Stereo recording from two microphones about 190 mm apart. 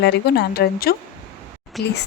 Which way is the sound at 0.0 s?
60° left (ahead or behind).